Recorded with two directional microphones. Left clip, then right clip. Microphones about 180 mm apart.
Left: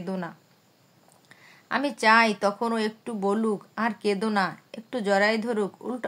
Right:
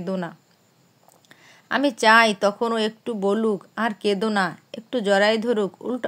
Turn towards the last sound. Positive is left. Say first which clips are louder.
# right 5 dB
turn(degrees=-25)  # may be behind; listen again after turning